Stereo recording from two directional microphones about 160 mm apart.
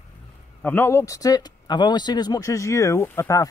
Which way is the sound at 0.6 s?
10° left (ahead or behind).